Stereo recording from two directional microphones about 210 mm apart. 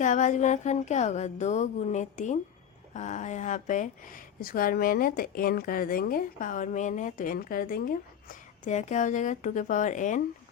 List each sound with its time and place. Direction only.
0.0 s speech: 35° left (ahead or behind)